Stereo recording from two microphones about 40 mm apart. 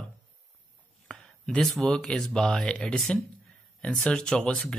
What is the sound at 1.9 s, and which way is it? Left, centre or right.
Speech, centre.